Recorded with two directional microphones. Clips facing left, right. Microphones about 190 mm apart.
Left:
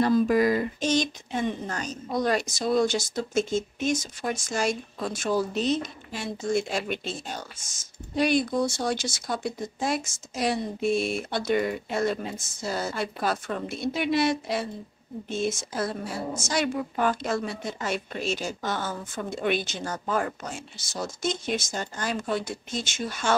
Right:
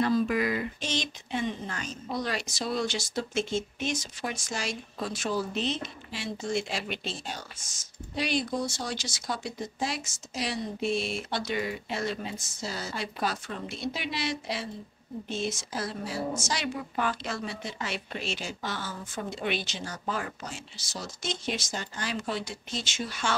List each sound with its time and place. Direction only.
0.0 s a woman's voice: 40° left (ahead or behind)
8.2 s a woman's voice: 50° left (ahead or behind)